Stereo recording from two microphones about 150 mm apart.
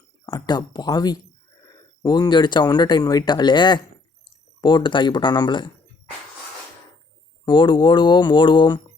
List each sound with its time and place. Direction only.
0.3 s speech: 30° left (ahead or behind)
7.4 s speech: 30° left (ahead or behind)